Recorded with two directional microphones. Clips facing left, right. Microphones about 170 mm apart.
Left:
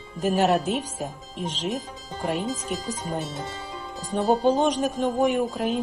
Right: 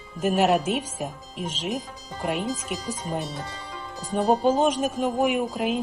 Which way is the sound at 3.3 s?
20° left (ahead or behind).